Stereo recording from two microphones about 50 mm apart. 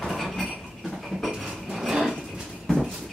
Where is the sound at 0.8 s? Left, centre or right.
Centre.